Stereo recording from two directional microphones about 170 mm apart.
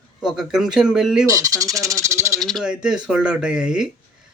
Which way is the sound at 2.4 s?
Centre (ahead or behind).